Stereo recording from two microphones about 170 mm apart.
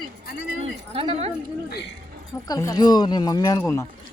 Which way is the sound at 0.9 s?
35° right (ahead or behind).